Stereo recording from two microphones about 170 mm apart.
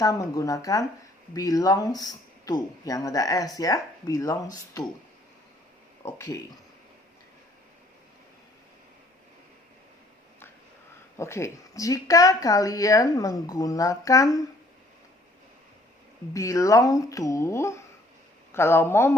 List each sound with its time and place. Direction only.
0.0 s speech: 20° left (ahead or behind)
6.1 s speech: 15° left (ahead or behind)
11.2 s speech: 15° left (ahead or behind)
16.3 s speech: 20° left (ahead or behind)